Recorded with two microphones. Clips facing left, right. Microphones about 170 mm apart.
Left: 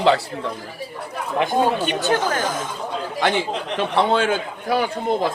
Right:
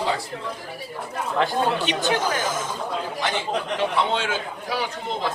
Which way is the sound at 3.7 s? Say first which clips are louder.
Left 6 dB; 55° left (ahead or behind).